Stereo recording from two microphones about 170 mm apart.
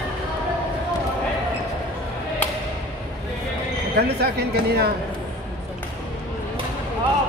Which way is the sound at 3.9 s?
70° right (ahead or behind).